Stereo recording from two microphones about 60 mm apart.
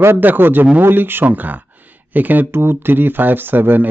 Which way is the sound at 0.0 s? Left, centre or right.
Right.